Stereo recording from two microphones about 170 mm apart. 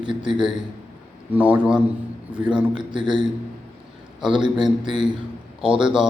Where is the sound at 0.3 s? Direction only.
30° right (ahead or behind).